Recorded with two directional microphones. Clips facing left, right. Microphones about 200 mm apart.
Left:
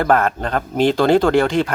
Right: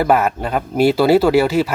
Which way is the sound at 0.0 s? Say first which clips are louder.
Right 1 dB; 5° right (ahead or behind).